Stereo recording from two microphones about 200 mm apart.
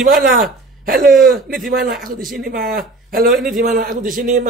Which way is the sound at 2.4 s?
45° right (ahead or behind).